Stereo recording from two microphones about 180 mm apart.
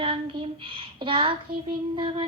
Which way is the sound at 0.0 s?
30° right (ahead or behind).